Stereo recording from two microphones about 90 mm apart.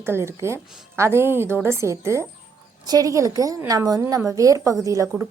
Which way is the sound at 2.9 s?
40° right (ahead or behind).